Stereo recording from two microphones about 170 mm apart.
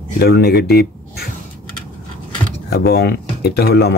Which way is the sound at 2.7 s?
70° left (ahead or behind).